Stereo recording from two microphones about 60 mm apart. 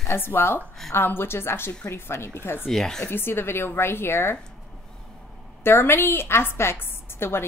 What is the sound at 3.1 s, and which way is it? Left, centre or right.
Speech, left.